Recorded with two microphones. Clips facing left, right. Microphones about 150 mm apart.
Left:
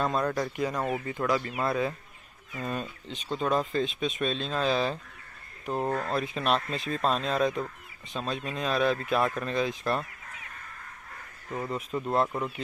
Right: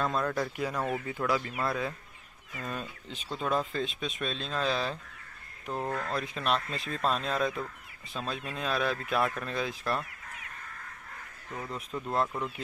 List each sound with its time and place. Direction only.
0.0 s speech: centre (ahead or behind)
5.7 s speech: 30° left (ahead or behind)
6.1 s speech: 5° left (ahead or behind)
11.6 s speech: 5° left (ahead or behind)
12.3 s speech: 20° left (ahead or behind)